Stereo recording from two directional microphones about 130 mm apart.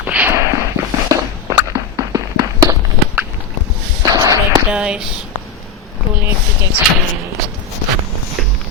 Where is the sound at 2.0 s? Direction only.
25° right (ahead or behind).